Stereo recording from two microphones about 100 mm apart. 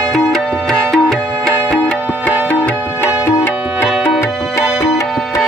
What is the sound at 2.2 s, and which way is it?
Tabla, 15° left (ahead or behind).